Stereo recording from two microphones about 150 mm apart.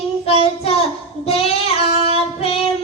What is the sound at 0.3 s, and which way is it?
Child singing, 40° left (ahead or behind).